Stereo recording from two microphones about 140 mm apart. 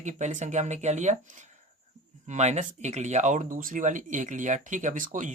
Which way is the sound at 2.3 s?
55° right (ahead or behind).